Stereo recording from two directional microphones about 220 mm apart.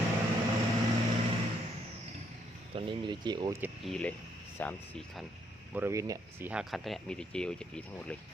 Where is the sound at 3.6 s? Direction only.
Centre (ahead or behind).